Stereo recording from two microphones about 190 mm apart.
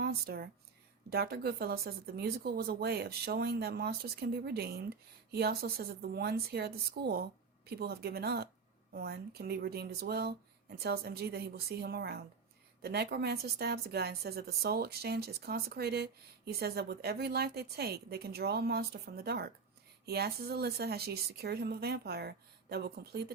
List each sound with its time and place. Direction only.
0.0 s speech: 55° right (ahead or behind)